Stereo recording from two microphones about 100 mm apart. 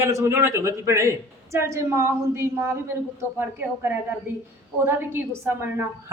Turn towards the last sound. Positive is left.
turn(degrees=-20)  # may be behind; listen again after turning